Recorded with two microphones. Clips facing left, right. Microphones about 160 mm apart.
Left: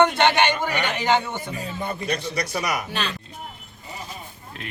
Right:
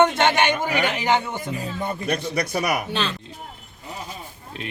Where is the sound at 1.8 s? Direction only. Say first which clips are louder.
Right 2 dB; 50° right (ahead or behind).